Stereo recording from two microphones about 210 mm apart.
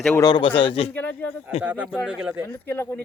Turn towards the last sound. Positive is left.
turn(degrees=10)  # may be behind; listen again after turning